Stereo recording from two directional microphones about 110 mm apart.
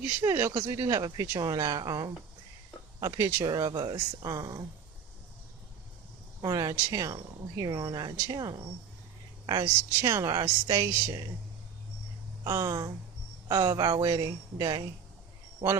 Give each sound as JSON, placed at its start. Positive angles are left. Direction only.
{"t": 0.0, "sound": "speech", "side_deg": -25}
{"t": 6.4, "sound": "speech", "side_deg": -30}
{"t": 12.5, "sound": "speech", "side_deg": -30}